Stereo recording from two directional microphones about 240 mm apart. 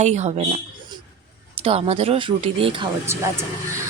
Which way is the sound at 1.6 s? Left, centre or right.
Right.